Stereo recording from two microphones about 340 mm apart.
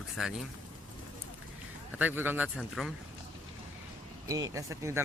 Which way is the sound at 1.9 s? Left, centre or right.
Centre.